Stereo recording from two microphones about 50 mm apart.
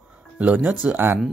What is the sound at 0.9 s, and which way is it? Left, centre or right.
Speech, right.